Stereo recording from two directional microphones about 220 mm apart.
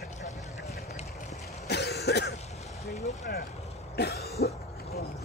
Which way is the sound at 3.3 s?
45° left (ahead or behind).